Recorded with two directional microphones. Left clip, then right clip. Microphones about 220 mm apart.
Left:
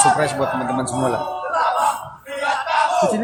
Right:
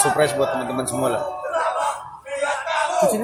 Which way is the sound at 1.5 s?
40° left (ahead or behind).